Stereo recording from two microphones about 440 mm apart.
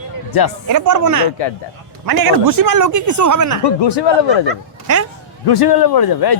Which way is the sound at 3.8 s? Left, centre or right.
Left.